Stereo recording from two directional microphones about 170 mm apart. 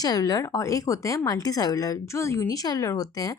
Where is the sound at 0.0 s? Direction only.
20° left (ahead or behind).